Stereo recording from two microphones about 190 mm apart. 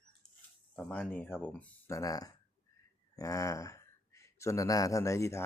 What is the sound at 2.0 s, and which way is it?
Speech, 20° left (ahead or behind).